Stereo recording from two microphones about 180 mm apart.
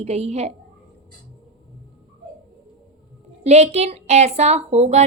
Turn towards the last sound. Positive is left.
turn(degrees=-35)  # may be behind; listen again after turning